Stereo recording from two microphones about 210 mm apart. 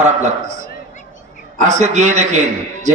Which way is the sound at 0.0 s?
35° right (ahead or behind).